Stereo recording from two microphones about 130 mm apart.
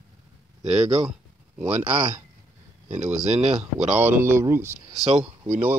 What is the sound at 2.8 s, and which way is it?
Speech, 65° right (ahead or behind).